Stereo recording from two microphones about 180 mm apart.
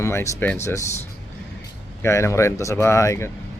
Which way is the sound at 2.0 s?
15° left (ahead or behind).